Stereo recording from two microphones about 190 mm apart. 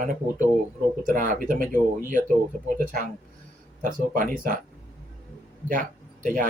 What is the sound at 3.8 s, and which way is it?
Speech, 45° right (ahead or behind).